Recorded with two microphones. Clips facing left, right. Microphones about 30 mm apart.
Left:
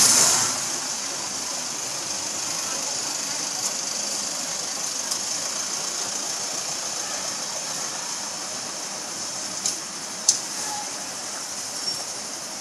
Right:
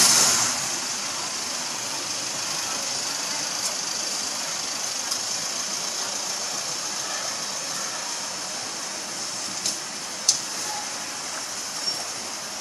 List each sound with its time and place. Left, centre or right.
0.0 s vehicle: centre
0.3 s vehicle: centre